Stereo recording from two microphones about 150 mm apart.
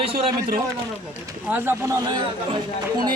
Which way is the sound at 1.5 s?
15° right (ahead or behind).